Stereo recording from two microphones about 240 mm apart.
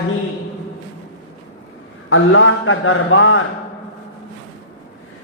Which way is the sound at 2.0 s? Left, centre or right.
Left.